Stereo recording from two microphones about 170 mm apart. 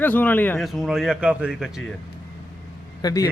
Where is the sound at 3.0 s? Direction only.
20° left (ahead or behind).